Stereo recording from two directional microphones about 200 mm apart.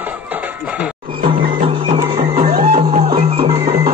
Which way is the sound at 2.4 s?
50° right (ahead or behind).